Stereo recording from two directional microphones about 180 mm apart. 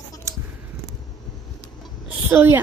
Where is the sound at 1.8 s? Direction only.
10° right (ahead or behind).